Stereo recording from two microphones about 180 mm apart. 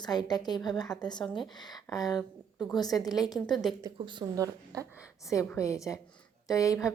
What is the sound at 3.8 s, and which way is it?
Speech, 25° right (ahead or behind).